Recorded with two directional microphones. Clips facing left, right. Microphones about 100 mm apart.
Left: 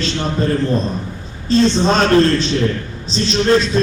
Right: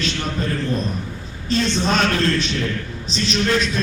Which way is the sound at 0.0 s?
30° left (ahead or behind).